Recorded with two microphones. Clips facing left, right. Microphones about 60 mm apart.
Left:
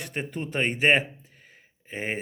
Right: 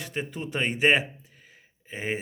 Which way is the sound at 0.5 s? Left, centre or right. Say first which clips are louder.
Left 1 dB; left.